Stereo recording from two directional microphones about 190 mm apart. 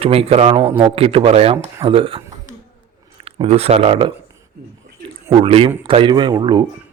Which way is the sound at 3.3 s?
30° right (ahead or behind).